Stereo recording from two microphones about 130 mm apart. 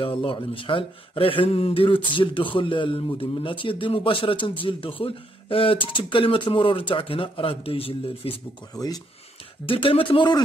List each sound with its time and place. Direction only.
0.0 s a man's voice: 40° left (ahead or behind)
8.7 s speech: 30° left (ahead or behind)
9.7 s speech: 45° left (ahead or behind)